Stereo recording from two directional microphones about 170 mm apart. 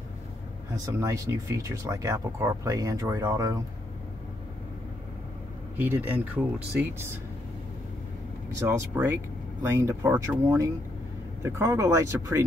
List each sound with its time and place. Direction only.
0.8 s speech: 20° right (ahead or behind)
5.8 s speech: 10° right (ahead or behind)
8.5 s speech: 15° right (ahead or behind)